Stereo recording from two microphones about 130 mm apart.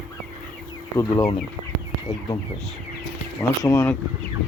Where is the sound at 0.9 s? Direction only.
20° left (ahead or behind).